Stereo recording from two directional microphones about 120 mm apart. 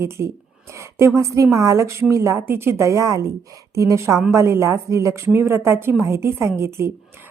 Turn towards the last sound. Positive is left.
turn(degrees=-20)  # may be behind; listen again after turning